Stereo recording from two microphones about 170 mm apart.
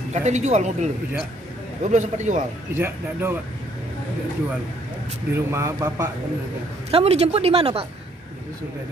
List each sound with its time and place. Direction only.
0.1 s a man's voice: 45° right (ahead or behind)
2.7 s a man's voice: 15° right (ahead or behind)
5.3 s a man's voice: 15° right (ahead or behind)
6.9 s speech: 35° right (ahead or behind)